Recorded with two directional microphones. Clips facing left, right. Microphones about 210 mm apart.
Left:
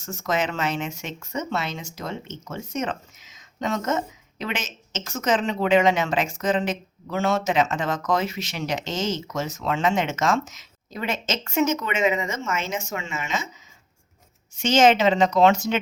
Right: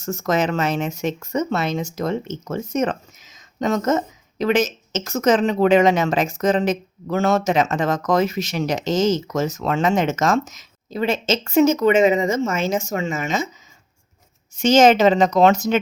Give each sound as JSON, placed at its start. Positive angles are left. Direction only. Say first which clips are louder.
{"t": 0.0, "sound": "speech", "louder": "right 5 dB", "side_deg": -40}
{"t": 10.8, "sound": "speech", "louder": "right 7 dB", "side_deg": -30}
{"t": 14.6, "sound": "speech", "louder": "right 4 dB", "side_deg": -40}